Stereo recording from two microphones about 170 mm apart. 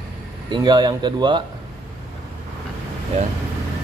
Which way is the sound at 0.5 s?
25° right (ahead or behind).